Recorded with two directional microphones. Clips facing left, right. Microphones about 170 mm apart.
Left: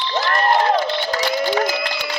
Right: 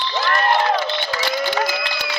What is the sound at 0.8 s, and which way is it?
Crowd, 40° left (ahead or behind).